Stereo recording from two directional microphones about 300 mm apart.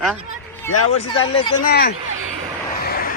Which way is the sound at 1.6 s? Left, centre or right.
Left.